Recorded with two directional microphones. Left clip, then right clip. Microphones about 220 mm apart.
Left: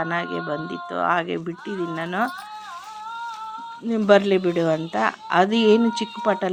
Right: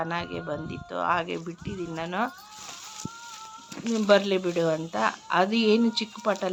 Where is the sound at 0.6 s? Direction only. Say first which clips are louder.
Left 7 dB; 40° left (ahead or behind).